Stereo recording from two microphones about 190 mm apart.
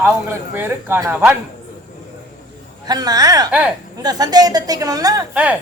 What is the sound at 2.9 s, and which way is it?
Speech, 20° right (ahead or behind).